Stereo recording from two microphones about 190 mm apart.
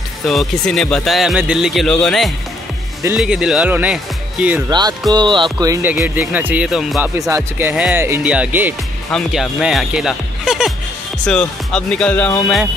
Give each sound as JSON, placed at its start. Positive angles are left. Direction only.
{"t": 0.3, "sound": "speech", "side_deg": 0}
{"t": 4.6, "sound": "speech", "side_deg": -20}
{"t": 5.1, "sound": "music", "side_deg": -25}
{"t": 7.2, "sound": "music", "side_deg": -15}
{"t": 9.1, "sound": "speech", "side_deg": 0}